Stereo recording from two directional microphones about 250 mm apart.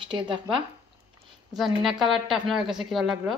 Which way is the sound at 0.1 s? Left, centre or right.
Centre.